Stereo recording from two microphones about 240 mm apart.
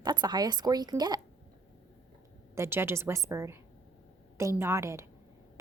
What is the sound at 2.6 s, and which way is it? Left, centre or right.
A woman's voice, centre.